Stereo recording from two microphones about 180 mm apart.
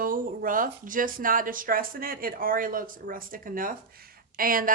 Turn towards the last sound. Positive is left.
turn(degrees=-50)  # may be behind; listen again after turning